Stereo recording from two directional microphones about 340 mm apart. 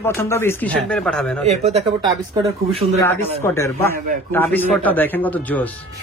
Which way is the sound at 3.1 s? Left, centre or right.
Centre.